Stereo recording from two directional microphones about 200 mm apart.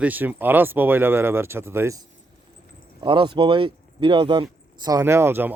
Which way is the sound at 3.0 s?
25° right (ahead or behind).